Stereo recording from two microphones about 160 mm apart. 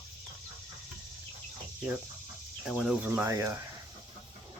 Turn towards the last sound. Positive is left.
turn(degrees=-15)  # may be behind; listen again after turning